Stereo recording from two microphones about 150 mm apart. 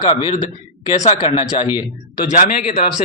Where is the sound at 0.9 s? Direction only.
50° left (ahead or behind).